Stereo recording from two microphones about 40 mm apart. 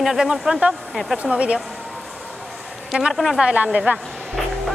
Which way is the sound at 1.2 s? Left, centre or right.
Right.